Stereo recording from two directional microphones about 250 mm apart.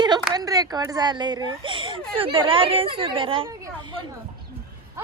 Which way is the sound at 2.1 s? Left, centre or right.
Right.